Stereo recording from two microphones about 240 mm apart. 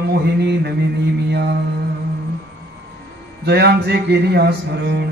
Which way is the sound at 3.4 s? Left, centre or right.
Right.